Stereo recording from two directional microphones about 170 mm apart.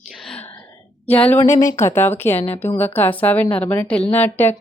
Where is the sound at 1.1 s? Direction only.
10° left (ahead or behind).